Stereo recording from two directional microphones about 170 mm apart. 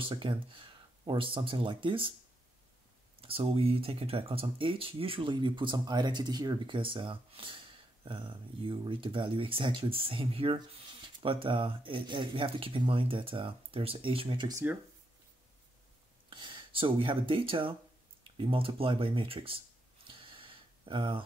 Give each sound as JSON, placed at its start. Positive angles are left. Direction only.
{"t": 0.0, "sound": "speech", "side_deg": -30}
{"t": 3.2, "sound": "speech", "side_deg": -35}
{"t": 16.3, "sound": "speech", "side_deg": -30}
{"t": 20.1, "sound": "a sound", "side_deg": -30}